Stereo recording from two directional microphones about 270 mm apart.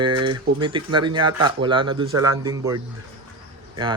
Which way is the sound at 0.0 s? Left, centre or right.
Centre.